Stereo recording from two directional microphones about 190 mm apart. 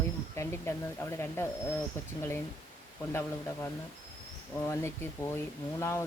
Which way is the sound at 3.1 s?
15° left (ahead or behind).